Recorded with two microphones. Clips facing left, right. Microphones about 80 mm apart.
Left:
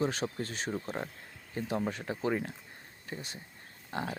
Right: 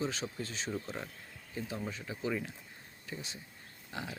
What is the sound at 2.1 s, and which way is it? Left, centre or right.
Speech, left.